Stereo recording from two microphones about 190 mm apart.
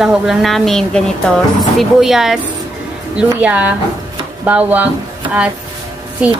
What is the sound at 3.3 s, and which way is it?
Speech, 5° right (ahead or behind).